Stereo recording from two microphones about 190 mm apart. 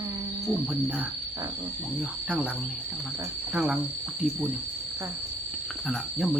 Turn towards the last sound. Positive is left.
turn(degrees=0)  # may be behind; listen again after turning